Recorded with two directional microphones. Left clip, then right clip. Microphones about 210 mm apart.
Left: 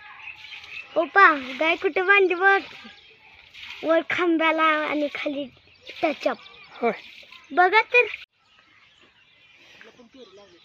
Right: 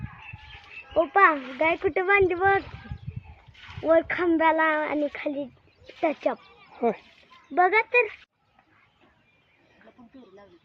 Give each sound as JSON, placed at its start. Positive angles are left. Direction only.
{"t": 0.9, "sound": "speech", "side_deg": 40}
{"t": 3.8, "sound": "speech", "side_deg": 40}
{"t": 7.5, "sound": "speech", "side_deg": 40}